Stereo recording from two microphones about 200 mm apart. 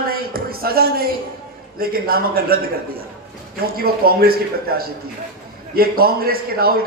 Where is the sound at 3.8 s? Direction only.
50° right (ahead or behind).